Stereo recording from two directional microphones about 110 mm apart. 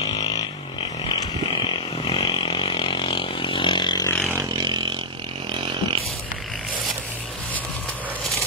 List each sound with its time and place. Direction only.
1.0 s a sound: 50° left (ahead or behind)
4.1 s vehicle: 20° left (ahead or behind)
4.4 s vehicle: 45° right (ahead or behind)